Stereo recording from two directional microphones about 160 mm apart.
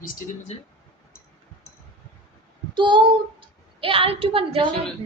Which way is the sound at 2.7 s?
30° right (ahead or behind).